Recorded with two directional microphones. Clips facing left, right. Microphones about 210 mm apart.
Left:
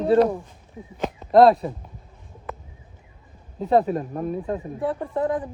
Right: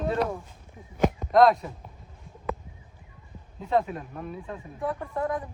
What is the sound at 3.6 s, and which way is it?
Speech, 35° left (ahead or behind).